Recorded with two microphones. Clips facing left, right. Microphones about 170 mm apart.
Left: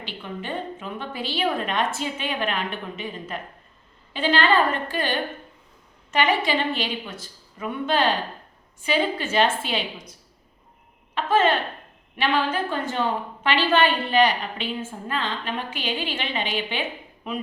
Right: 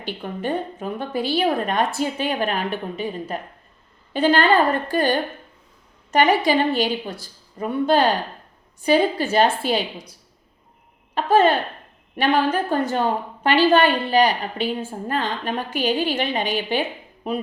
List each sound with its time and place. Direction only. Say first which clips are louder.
0.0 s a woman's voice: right 6 dB; 45° right (ahead or behind)